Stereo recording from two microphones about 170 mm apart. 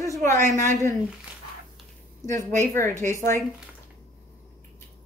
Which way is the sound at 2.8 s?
45° right (ahead or behind).